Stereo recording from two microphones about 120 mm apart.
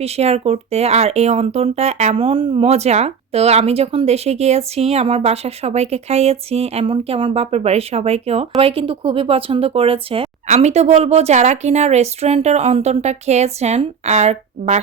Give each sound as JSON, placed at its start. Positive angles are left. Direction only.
{"t": 0.0, "sound": "speech", "side_deg": -60}
{"t": 7.5, "sound": "speech", "side_deg": -60}
{"t": 10.4, "sound": "speech", "side_deg": -75}